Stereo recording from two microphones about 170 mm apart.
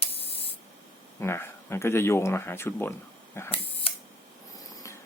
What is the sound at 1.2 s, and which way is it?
Speech, 15° left (ahead or behind).